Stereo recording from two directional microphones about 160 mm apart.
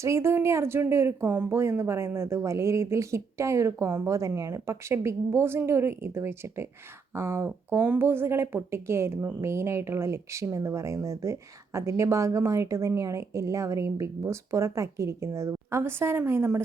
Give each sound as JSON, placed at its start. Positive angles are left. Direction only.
{"t": 0.0, "sound": "speech", "side_deg": -15}